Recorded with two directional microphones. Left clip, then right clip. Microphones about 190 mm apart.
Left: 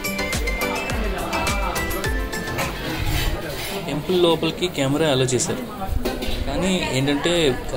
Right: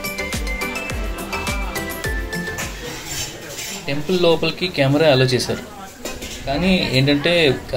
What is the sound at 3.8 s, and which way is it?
Speech, 30° left (ahead or behind).